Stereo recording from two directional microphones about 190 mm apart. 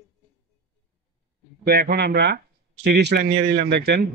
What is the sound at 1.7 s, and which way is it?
Speech, 55° right (ahead or behind).